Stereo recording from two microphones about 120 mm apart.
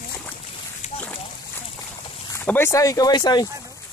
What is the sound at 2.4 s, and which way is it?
Speech, 20° left (ahead or behind).